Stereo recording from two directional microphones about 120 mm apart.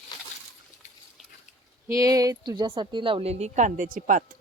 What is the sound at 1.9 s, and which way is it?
Speech, 30° right (ahead or behind).